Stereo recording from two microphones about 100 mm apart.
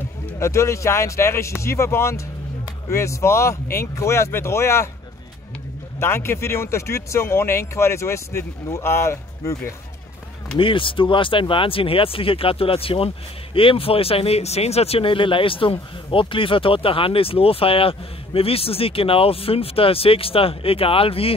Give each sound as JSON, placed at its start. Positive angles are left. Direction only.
{"t": 0.4, "sound": "speech", "side_deg": 30}
{"t": 5.9, "sound": "speech", "side_deg": 25}
{"t": 10.6, "sound": "speech", "side_deg": 60}